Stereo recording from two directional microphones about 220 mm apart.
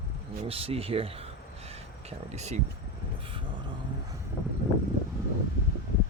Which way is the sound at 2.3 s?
30° right (ahead or behind).